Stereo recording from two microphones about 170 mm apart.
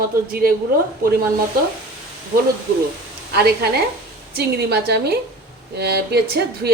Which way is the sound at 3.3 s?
70° right (ahead or behind).